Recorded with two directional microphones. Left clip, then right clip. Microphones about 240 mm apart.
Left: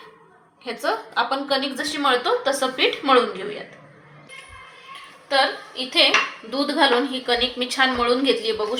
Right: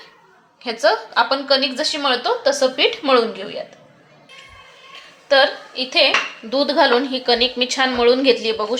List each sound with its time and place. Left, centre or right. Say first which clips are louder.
0.6 s a woman's voice: right 7 dB; right
5.3 s a woman's voice: right 5 dB; right